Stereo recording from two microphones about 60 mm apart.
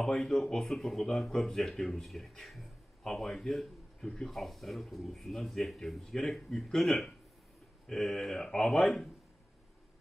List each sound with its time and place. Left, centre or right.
0.0 s speech: centre